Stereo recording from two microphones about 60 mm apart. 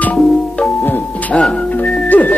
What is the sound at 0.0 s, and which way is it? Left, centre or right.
Music, left.